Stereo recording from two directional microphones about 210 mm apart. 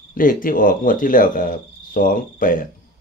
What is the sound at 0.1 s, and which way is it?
Speech, 40° left (ahead or behind).